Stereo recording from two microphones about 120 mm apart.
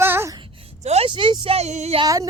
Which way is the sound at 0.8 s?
65° right (ahead or behind).